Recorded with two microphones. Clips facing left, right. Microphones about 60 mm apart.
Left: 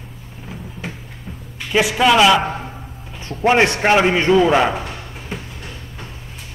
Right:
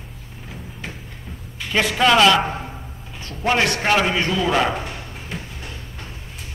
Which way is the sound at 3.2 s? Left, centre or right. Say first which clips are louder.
Left 8 dB; left.